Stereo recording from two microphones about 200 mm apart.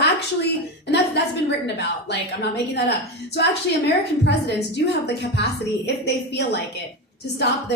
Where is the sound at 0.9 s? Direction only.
60° left (ahead or behind).